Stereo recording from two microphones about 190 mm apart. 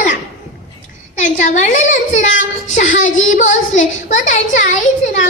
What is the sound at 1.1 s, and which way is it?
Speech, 40° left (ahead or behind).